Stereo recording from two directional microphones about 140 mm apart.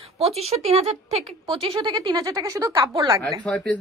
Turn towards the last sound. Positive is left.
turn(degrees=5)  # may be behind; listen again after turning